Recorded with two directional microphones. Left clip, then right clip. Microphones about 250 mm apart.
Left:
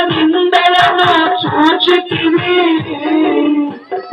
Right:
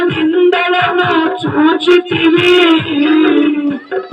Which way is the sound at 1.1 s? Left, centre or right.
Right.